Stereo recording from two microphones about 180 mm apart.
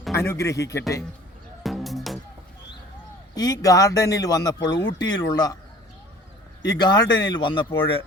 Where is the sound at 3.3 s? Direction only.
20° left (ahead or behind).